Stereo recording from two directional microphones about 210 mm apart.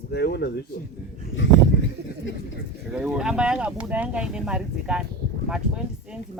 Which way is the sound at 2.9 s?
5° right (ahead or behind).